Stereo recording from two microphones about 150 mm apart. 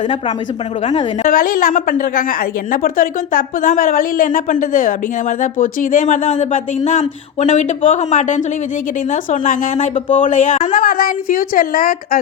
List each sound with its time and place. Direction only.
1.2 s a woman's voice: 65° left (ahead or behind)